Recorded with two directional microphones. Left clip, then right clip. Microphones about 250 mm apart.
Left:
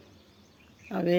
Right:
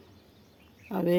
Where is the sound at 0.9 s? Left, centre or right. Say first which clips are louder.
Even; centre.